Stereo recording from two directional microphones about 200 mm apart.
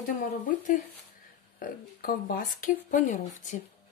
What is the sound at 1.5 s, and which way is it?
Speech, 45° left (ahead or behind).